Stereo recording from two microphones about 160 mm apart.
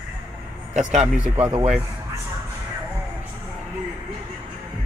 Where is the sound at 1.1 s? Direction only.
5° right (ahead or behind).